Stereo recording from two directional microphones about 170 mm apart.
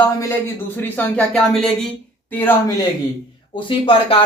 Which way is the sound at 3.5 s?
30° left (ahead or behind).